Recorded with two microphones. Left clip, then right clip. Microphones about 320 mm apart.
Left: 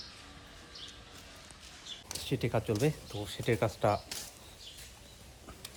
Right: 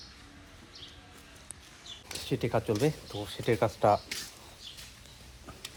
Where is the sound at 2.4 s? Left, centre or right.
Right.